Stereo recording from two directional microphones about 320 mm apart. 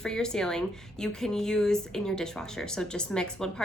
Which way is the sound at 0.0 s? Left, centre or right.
Centre.